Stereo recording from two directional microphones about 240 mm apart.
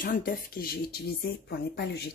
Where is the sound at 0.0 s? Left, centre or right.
Left.